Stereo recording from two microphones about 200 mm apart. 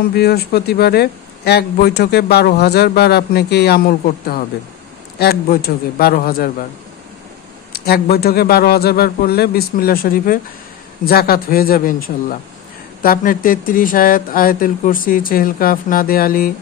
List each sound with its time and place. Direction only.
0.1 s a man's voice: 50° left (ahead or behind)
7.7 s a man's voice: 50° left (ahead or behind)